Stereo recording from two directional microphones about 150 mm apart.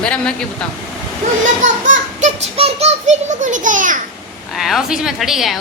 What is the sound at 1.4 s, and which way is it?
A child's voice, 55° right (ahead or behind).